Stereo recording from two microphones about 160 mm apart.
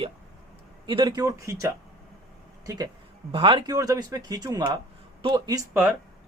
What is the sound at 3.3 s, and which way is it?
Speech, 35° right (ahead or behind).